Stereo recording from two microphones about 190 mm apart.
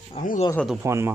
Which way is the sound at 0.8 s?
15° right (ahead or behind).